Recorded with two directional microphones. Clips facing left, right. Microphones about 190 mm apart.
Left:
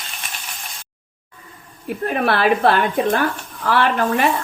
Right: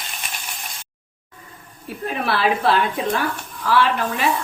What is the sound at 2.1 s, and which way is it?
A woman's voice, 55° left (ahead or behind).